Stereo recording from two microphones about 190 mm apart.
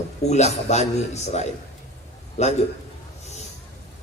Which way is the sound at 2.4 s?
35° left (ahead or behind).